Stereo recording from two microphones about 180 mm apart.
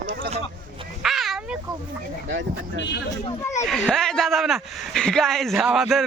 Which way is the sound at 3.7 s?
Centre (ahead or behind).